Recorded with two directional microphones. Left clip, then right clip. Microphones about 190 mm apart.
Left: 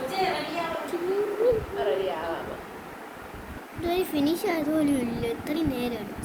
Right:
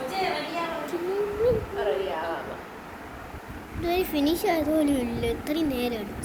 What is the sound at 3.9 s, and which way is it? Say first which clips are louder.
A child's voice: right 1 dB; 10° left (ahead or behind).